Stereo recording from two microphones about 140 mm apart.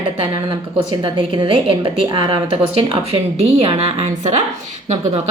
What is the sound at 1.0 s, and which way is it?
A woman's voice, 40° right (ahead or behind).